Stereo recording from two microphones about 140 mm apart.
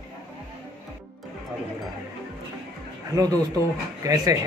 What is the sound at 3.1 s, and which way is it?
Speech, 25° right (ahead or behind).